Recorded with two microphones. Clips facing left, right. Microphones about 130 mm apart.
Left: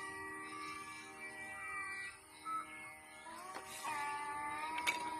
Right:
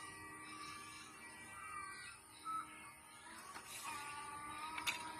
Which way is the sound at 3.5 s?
90° left.